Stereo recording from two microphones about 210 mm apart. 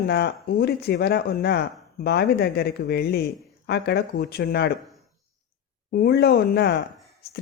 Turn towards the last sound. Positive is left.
turn(degrees=50)  # may be behind; listen again after turning